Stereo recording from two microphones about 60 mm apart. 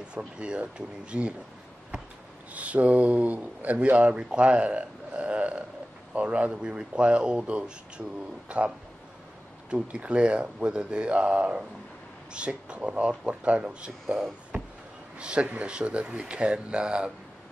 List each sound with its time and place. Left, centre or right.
0.1 s speech: centre
2.5 s speech: right
14.0 s speech: centre
15.1 s speech: centre